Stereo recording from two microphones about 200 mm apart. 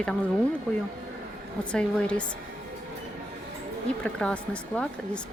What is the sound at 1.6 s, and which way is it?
Speech, 5° left (ahead or behind).